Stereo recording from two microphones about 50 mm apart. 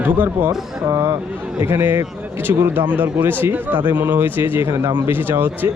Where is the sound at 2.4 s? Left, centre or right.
Right.